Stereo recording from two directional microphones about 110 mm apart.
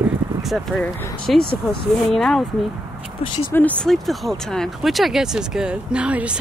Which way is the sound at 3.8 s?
Centre (ahead or behind).